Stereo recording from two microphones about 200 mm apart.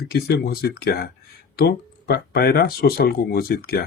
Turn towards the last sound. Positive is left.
turn(degrees=50)  # may be behind; listen again after turning